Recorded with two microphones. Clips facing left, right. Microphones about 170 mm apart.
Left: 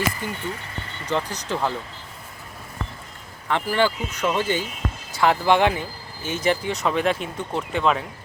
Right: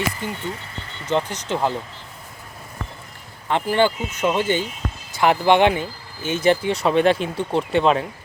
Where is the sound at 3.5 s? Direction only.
20° right (ahead or behind).